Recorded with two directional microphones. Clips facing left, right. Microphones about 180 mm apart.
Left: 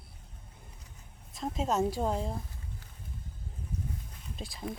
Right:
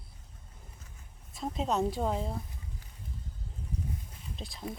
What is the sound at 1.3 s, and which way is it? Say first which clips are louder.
Speech: even; centre (ahead or behind).